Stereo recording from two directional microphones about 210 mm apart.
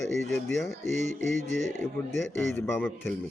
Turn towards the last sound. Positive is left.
turn(degrees=10)  # may be behind; listen again after turning